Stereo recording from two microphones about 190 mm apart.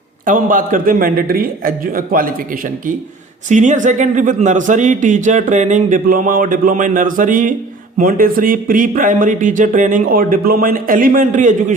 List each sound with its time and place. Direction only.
0.3 s a man's voice: 45° right (ahead or behind)